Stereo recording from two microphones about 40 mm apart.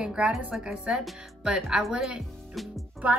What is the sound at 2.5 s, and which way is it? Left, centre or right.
Music, centre.